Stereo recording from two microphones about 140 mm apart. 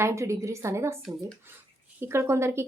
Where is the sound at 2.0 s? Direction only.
20° right (ahead or behind).